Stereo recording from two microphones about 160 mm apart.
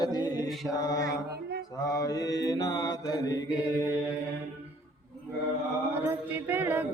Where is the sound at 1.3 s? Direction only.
85° right.